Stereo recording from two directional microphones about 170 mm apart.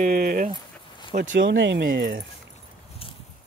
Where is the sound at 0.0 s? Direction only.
60° right (ahead or behind).